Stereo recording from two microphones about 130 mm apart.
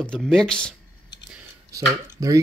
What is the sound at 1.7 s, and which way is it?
Speech, 25° right (ahead or behind).